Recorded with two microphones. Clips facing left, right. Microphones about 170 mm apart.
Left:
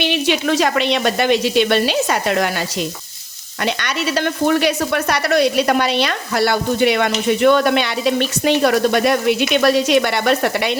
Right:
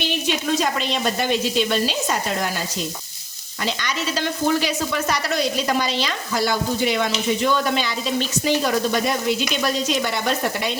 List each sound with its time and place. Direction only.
0.0 s speech: 75° left (ahead or behind)
3.7 s speech: 65° left (ahead or behind)